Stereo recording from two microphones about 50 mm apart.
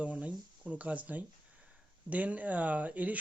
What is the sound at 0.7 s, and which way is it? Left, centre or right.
Speech, right.